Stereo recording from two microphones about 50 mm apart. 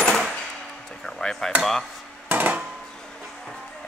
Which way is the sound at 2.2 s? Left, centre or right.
Right.